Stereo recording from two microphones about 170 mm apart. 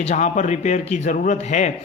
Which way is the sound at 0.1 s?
45° left (ahead or behind).